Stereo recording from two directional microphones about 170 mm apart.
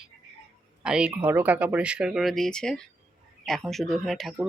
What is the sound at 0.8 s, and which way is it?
Speech, 5° right (ahead or behind).